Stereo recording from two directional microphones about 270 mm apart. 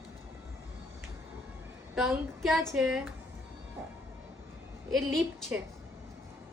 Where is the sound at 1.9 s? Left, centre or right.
Centre.